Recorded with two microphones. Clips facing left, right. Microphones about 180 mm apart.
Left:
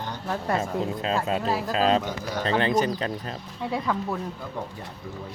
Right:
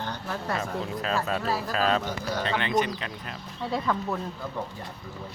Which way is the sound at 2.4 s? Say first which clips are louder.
Left 4 dB; 40° left (ahead or behind).